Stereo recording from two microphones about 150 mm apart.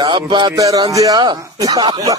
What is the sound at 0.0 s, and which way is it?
Speech, 30° right (ahead or behind).